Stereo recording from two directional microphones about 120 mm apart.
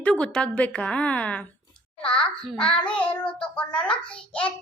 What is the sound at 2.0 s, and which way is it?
A child's voice, 5° left (ahead or behind).